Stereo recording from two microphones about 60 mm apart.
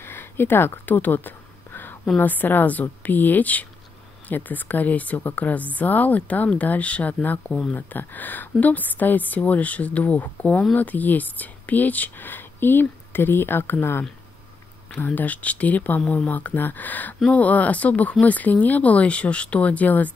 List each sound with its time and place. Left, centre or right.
0.0 s a sound: left
2.1 s speech: left
7.7 s speech: left